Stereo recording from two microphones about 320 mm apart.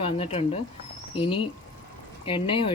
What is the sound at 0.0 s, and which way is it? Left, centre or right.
Speech, centre.